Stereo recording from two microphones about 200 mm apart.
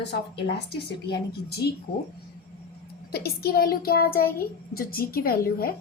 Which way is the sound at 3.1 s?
50° left (ahead or behind).